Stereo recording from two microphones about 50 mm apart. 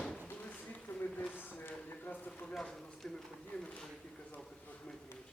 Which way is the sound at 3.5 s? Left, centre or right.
Left.